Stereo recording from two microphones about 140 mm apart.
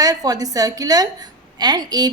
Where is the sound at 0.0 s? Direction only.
25° right (ahead or behind).